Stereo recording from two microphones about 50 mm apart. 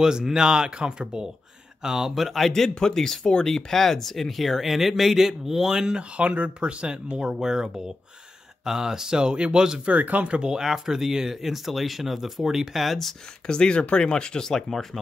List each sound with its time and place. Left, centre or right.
0.0 s speech: centre
5.9 s speech: right
9.8 s speech: right; by 13.1 s centre
13.5 s speech: centre